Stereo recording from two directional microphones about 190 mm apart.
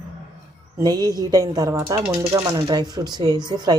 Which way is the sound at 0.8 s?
20° right (ahead or behind).